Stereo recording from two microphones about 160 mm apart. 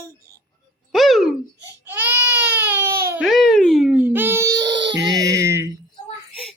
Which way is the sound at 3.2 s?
Centre (ahead or behind).